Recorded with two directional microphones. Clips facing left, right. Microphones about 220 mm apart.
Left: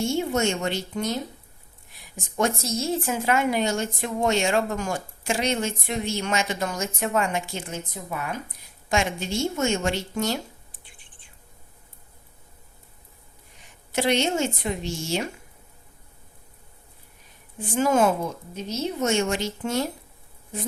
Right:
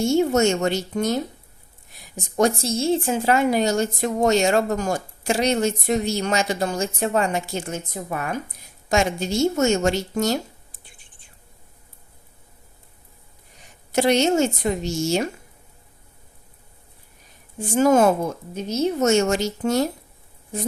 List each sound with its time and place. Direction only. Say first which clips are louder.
0.0 s speech: right 6 dB; 40° right (ahead or behind)
2.1 s speech: right 5 dB; 35° right (ahead or behind)
13.9 s speech: right 5 dB; 40° right (ahead or behind)
17.6 s speech: right 5 dB; 40° right (ahead or behind)